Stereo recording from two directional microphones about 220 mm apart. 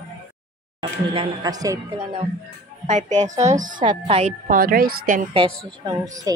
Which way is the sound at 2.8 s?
35° right (ahead or behind).